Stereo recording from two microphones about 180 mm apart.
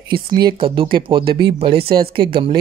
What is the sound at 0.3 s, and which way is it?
Speech, 25° right (ahead or behind).